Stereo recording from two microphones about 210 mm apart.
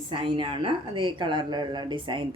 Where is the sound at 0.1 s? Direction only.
25° right (ahead or behind).